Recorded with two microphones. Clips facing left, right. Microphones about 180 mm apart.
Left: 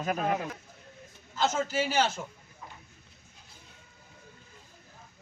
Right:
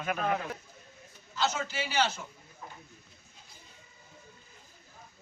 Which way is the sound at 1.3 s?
45° left (ahead or behind).